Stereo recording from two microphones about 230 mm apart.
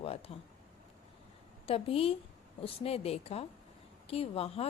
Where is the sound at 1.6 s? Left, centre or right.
Left.